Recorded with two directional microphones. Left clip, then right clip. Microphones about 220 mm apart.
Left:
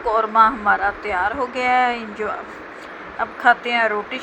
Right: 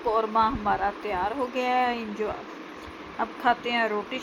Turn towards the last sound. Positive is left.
turn(degrees=15)  # may be behind; listen again after turning